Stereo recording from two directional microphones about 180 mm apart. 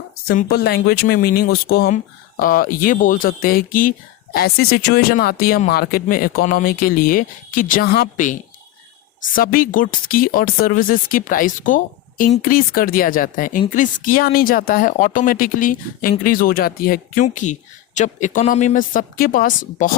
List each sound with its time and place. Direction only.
0.3 s speech: 60° left (ahead or behind)
8.1 s speech: 45° left (ahead or behind)